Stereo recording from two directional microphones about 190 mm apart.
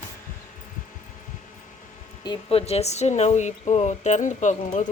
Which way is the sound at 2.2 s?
30° left (ahead or behind).